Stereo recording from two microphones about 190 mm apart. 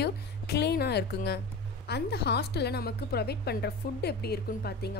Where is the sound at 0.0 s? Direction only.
60° left (ahead or behind).